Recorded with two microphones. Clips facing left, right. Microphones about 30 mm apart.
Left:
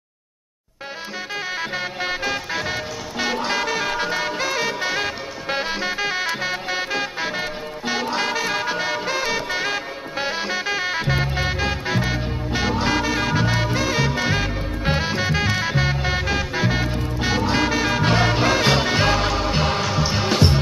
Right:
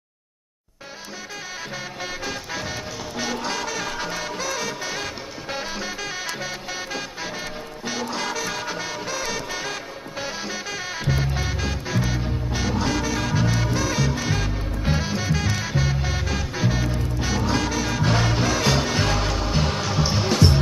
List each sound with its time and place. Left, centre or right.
2.0 s music: left
19.9 s music: centre
20.2 s music: left